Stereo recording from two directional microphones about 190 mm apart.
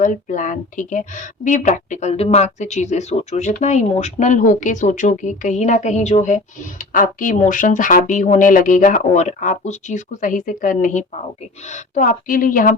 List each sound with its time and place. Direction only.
0.0 s a woman's voice: 40° left (ahead or behind)